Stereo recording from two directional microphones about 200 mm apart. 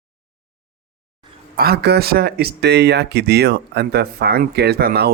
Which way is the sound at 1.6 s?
50° right (ahead or behind).